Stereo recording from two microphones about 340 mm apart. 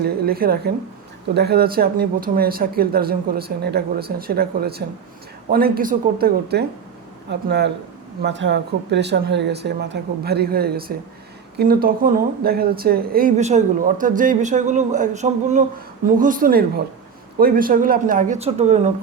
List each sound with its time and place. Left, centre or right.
0.0 s speech: right